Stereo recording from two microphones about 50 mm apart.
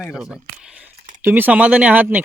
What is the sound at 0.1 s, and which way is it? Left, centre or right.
Speech, centre.